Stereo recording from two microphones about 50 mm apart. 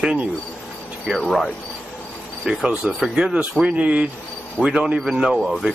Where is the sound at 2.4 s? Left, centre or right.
Centre.